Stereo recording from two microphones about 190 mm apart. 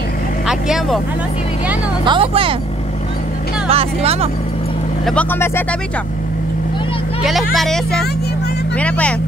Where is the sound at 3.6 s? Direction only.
30° right (ahead or behind).